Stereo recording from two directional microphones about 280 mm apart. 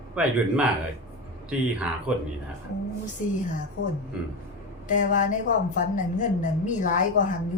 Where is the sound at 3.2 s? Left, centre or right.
Left.